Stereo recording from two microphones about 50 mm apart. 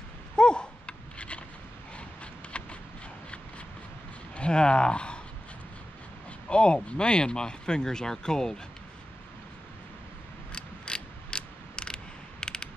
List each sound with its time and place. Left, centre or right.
0.4 s a sound: centre
2.5 s vehicle: left
4.4 s speech: centre
6.5 s speech: left
10.5 s mechanisms: centre